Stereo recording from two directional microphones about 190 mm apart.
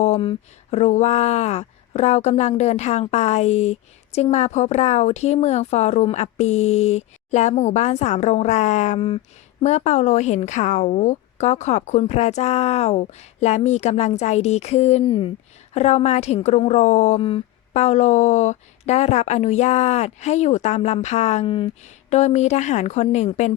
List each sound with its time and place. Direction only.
0.0 s speech: 30° left (ahead or behind)